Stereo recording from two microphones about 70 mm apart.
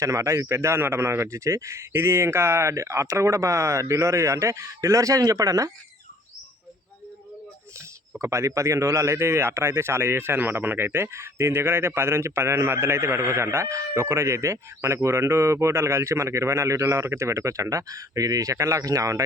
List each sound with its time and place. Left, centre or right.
0.0 s a man's voice: right
8.2 s a man's voice: right